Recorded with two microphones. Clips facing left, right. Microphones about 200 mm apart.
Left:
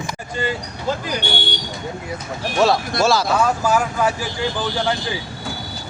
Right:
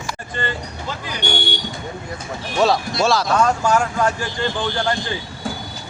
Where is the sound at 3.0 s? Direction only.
Centre (ahead or behind).